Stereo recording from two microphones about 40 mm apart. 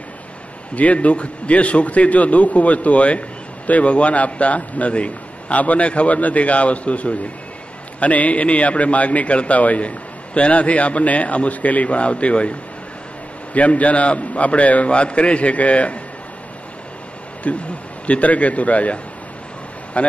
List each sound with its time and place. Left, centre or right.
0.7 s a man's voice: left
17.4 s a man's voice: left
20.0 s a man's voice: left